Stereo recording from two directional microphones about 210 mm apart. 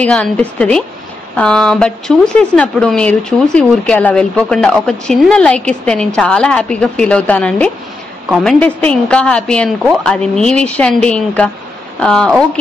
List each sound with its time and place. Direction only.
0.0 s speech: 5° left (ahead or behind)